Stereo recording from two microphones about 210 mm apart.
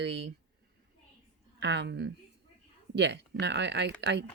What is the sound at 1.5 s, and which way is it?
Speech, 55° right (ahead or behind).